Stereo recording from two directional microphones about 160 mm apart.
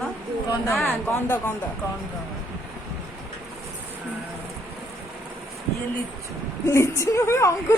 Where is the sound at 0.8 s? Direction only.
15° left (ahead or behind).